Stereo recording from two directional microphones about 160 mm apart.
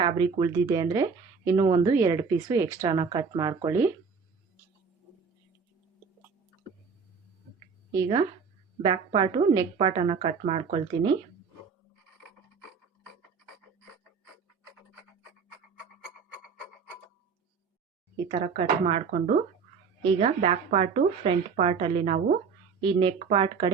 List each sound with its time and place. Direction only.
0.0 s speech: 30° right (ahead or behind)
7.9 s a woman's voice: 25° right (ahead or behind)
18.3 s a woman's voice: 35° right (ahead or behind)